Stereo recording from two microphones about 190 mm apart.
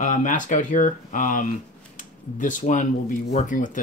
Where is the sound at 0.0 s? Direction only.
40° left (ahead or behind).